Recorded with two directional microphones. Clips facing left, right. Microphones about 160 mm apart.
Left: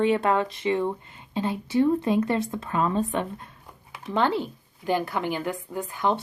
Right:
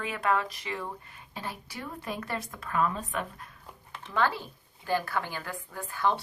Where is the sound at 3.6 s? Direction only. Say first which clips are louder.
Left 8 dB; 10° left (ahead or behind).